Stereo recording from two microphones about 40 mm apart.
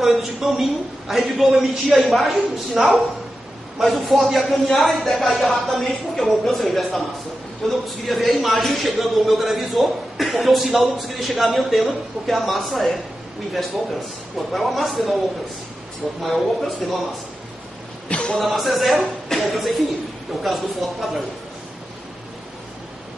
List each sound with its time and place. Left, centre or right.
0.0 s a man's voice: centre
14.5 s a man's voice: centre
16.2 s a man's voice: centre
18.0 s a sound: left
18.4 s a man's voice: centre